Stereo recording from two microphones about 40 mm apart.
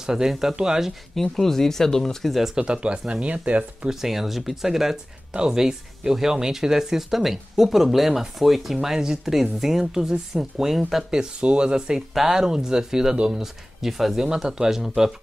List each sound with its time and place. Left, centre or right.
0.0 s speech: centre
1.1 s speech: centre
2.5 s speech: right
3.9 s speech: centre
5.3 s speech: centre
11.4 s speech: right
12.1 s speech: centre
13.7 s speech: centre